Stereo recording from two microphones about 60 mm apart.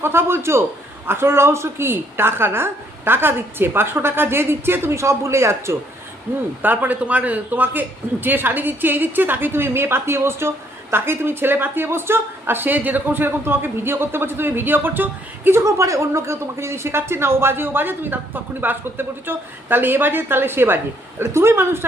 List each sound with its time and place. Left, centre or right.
0.0 s a man's voice: right
6.6 s speech: right
15.5 s speech: right